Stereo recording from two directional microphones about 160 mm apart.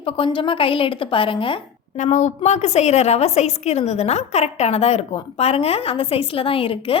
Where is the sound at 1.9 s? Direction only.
50° left (ahead or behind).